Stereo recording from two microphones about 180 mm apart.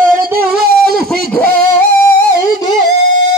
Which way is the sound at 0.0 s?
50° right (ahead or behind).